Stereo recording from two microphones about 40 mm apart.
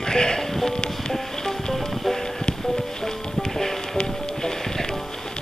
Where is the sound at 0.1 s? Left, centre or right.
Centre.